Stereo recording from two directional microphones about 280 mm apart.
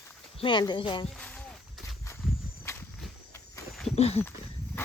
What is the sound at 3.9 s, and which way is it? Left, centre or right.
Speech, left.